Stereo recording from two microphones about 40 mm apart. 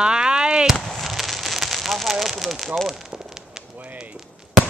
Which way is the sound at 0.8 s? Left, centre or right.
Centre.